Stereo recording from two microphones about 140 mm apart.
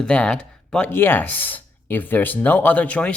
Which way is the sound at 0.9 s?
15° left (ahead or behind).